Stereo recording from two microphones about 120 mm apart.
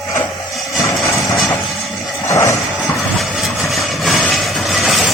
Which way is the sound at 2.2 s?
25° left (ahead or behind).